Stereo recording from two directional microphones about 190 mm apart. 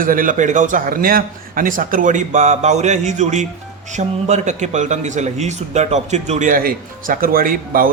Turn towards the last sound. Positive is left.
turn(degrees=-50)  # may be behind; listen again after turning